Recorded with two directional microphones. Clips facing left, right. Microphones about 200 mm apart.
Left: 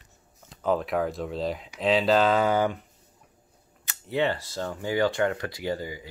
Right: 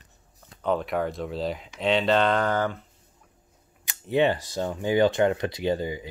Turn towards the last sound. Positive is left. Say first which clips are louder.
# right 4 dB
turn(degrees=-20)  # may be behind; listen again after turning